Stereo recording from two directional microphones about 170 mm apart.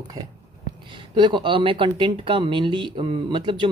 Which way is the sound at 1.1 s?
30° right (ahead or behind).